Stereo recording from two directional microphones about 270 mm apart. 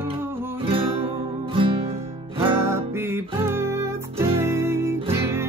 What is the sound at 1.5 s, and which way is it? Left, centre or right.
Music, centre.